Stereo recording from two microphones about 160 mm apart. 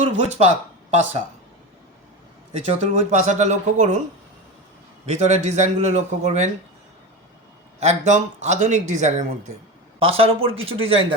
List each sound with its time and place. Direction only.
0.0 s speech: 40° right (ahead or behind)
2.5 s speech: 45° right (ahead or behind)
5.0 s speech: 45° right (ahead or behind)
7.8 s speech: 45° right (ahead or behind)
10.0 s speech: 35° right (ahead or behind)